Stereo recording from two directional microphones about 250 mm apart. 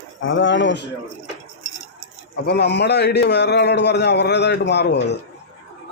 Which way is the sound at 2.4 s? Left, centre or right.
Left.